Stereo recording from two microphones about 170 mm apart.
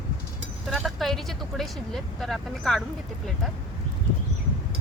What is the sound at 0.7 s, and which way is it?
Vehicle, centre (ahead or behind).